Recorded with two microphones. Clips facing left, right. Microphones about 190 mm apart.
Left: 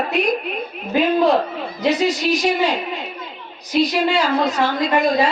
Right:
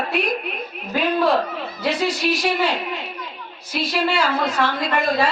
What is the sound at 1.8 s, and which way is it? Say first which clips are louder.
Speech: left 4 dB; 20° left (ahead or behind).